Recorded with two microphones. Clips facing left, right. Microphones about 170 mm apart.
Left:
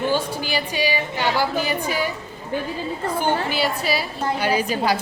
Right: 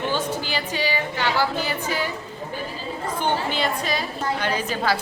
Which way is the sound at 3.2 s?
10° left (ahead or behind).